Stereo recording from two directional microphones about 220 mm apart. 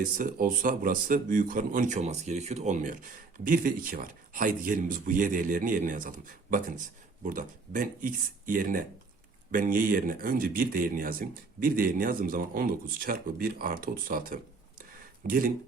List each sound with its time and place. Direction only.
0.2 s speech: 40° right (ahead or behind)